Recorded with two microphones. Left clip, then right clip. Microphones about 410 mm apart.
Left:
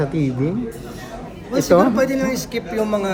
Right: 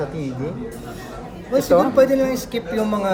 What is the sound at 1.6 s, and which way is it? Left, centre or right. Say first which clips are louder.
Speech: even; centre.